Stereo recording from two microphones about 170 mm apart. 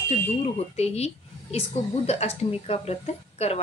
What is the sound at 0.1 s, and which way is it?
Speech, 35° left (ahead or behind).